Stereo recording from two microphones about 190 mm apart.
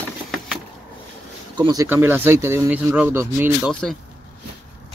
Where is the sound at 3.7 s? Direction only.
5° left (ahead or behind).